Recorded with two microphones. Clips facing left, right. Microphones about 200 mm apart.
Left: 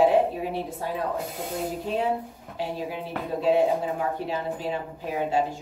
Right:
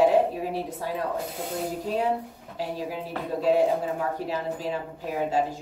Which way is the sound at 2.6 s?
40° right (ahead or behind).